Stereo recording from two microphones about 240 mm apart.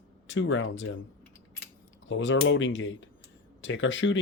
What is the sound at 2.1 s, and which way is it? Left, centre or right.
Speech, left.